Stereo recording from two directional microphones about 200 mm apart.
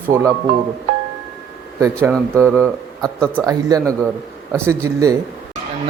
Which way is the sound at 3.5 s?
20° right (ahead or behind).